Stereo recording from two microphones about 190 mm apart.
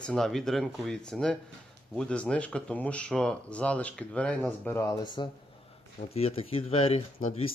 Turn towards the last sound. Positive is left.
turn(degrees=40)  # may be behind; listen again after turning